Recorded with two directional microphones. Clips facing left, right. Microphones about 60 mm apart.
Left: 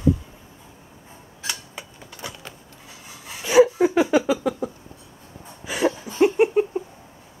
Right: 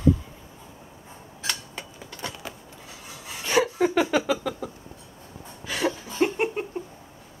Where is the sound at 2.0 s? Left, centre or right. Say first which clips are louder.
Right 1 dB; centre.